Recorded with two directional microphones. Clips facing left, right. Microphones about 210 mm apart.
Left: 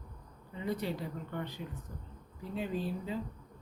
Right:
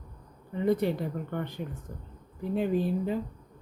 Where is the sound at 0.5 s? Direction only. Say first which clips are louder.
Right 9 dB; 55° right (ahead or behind).